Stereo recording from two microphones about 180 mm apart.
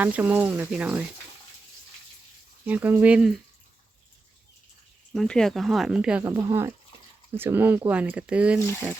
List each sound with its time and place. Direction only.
0.0 s speech: 10° right (ahead or behind)
2.6 s speech: 10° right (ahead or behind)
5.1 s speech: 5° left (ahead or behind)